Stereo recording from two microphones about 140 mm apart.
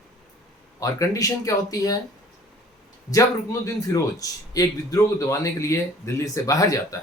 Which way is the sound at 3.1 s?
25° left (ahead or behind).